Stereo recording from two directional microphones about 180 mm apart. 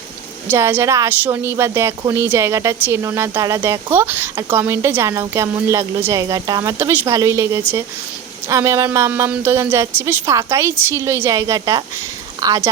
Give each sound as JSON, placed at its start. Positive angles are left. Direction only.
{"t": 0.5, "sound": "a woman's voice", "side_deg": -15}